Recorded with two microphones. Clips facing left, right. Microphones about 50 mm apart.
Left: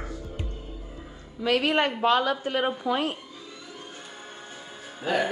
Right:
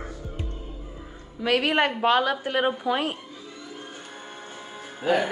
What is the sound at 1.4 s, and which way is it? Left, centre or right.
A woman's voice, right.